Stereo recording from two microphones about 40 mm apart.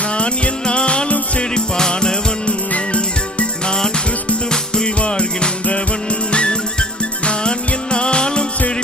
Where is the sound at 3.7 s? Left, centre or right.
Centre.